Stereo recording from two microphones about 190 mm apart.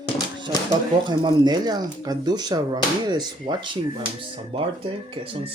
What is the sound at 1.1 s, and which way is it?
Speech, 25° right (ahead or behind).